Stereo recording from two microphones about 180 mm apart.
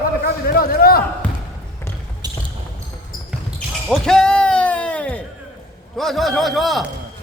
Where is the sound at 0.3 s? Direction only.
55° left (ahead or behind).